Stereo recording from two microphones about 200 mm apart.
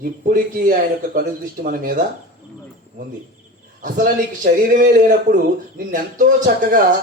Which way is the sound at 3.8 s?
45° right (ahead or behind).